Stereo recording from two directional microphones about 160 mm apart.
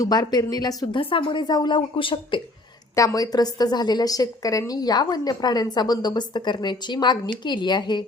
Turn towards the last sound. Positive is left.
turn(degrees=25)  # may be behind; listen again after turning